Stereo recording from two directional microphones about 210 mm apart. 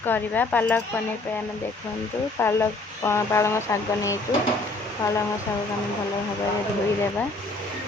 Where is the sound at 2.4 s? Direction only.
10° left (ahead or behind).